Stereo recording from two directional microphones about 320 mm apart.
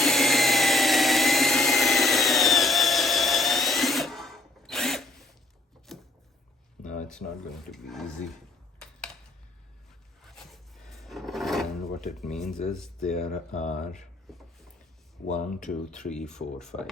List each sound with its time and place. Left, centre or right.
0.0 s jet engine: centre
5.9 s a sound: centre
6.8 s a sound: left
7.7 s speech: centre
10.2 s filing: centre
12.7 s speech: centre
13.5 s speech: left
13.9 s rub: centre
15.3 s speech: left
16.0 s speech: centre